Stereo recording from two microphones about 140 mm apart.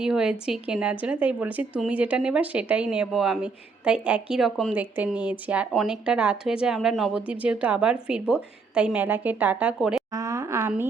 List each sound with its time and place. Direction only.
0.0 s a woman's voice: 5° right (ahead or behind)
4.7 s a woman's voice: 10° right (ahead or behind)
10.2 s a woman's voice: 20° right (ahead or behind)